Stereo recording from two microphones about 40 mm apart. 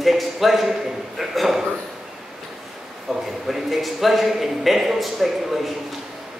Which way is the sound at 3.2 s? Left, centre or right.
Centre.